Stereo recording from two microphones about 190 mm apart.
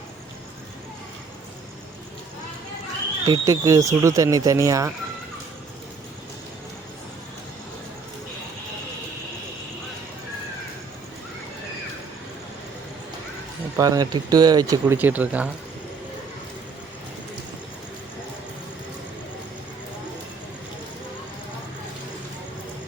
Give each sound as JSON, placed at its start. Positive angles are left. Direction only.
{"t": 3.2, "sound": "speech", "side_deg": -20}
{"t": 13.7, "sound": "speech", "side_deg": -20}